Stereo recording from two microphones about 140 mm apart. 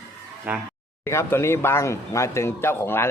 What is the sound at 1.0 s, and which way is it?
Speech, 20° left (ahead or behind).